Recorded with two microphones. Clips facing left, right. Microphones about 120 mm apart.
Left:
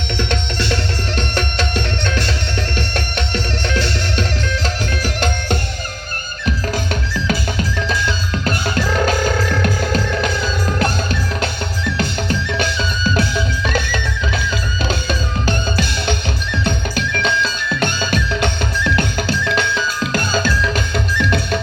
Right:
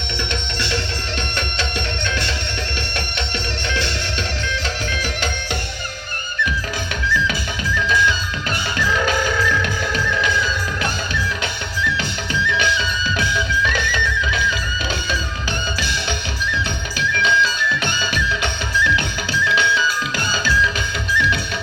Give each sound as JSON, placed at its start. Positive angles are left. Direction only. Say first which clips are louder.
{"t": 0.2, "sound": "music", "louder": "left 4 dB", "side_deg": 45}
{"t": 7.1, "sound": "music", "louder": "right 1 dB", "side_deg": 40}
{"t": 15.4, "sound": "music", "louder": "left 6 dB", "side_deg": 45}